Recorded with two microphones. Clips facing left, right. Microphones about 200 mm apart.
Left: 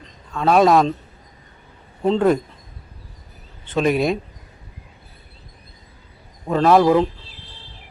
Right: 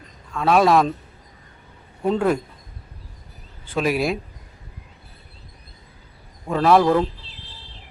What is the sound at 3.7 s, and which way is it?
Speech, 5° right (ahead or behind).